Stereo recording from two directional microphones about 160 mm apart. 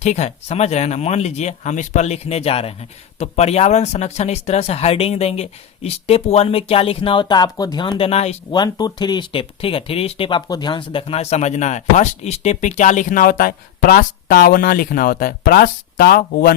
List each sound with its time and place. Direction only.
0.0 s speech: 45° left (ahead or behind)
8.5 s speech: 25° left (ahead or behind); by 16.6 s 75° left (ahead or behind)